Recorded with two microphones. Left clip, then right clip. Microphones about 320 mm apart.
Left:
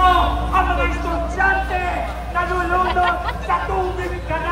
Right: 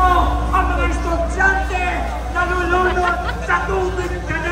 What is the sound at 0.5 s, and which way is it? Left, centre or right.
Vehicle, left.